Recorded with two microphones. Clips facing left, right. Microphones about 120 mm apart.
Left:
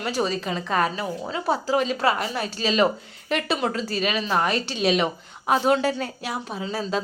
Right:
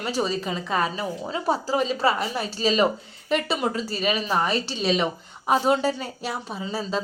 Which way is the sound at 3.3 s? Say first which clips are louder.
Even; 5° right (ahead or behind).